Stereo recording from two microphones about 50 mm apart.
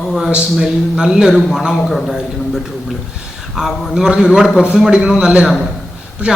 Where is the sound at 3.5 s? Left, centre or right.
Centre.